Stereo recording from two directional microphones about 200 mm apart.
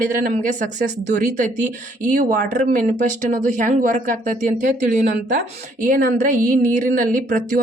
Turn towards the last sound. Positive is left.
turn(degrees=-40)  # may be behind; listen again after turning